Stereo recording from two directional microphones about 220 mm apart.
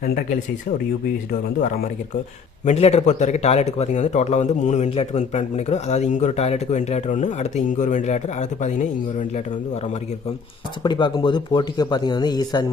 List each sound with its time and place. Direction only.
2.6 s a man's voice: 30° left (ahead or behind)
10.8 s speech: 20° left (ahead or behind)